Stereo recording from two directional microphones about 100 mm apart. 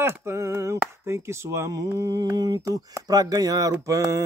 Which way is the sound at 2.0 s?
35° right (ahead or behind).